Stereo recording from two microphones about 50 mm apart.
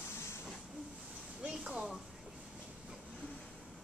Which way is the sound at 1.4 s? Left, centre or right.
Centre.